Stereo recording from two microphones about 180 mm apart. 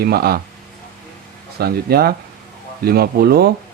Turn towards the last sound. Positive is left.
turn(degrees=-60)  # may be behind; listen again after turning